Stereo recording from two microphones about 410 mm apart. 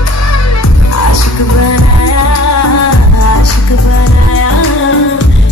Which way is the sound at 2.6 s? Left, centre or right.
Left.